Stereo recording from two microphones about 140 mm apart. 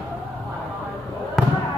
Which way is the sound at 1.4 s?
5° left (ahead or behind).